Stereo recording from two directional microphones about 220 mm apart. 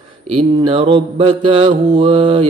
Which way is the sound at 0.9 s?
25° right (ahead or behind).